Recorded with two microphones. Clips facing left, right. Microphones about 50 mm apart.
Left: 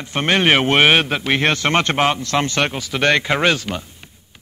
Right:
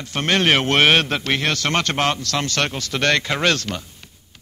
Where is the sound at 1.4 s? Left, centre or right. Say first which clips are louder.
Left 4 dB; left.